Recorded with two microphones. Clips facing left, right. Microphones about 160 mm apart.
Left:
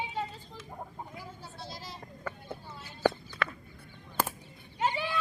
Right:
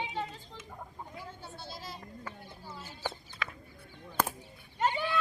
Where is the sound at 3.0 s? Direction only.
65° left (ahead or behind).